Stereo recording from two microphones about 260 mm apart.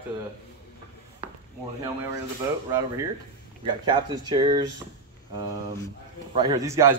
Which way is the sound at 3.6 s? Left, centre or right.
Centre.